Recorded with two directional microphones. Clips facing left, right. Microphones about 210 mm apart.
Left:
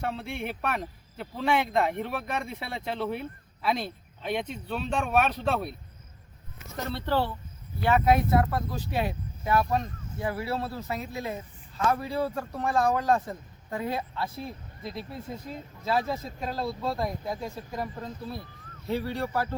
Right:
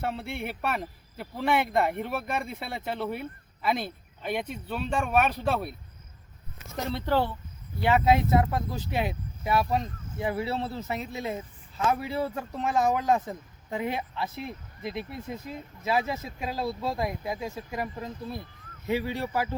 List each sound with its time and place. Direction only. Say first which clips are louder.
0.0 s a man's voice: even; 5° right (ahead or behind)
6.7 s speech: right 1 dB; 15° right (ahead or behind)
11.9 s a man's voice: left 1 dB; 5° right (ahead or behind)
12.5 s speech: right 1 dB; 20° right (ahead or behind)
15.9 s speech: even; 10° right (ahead or behind)